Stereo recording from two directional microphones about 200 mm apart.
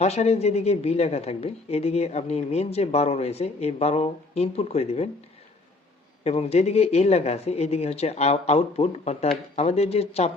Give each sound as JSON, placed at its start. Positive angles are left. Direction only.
{"t": 0.0, "sound": "a woman's voice", "side_deg": 35}
{"t": 6.2, "sound": "a woman's voice", "side_deg": 30}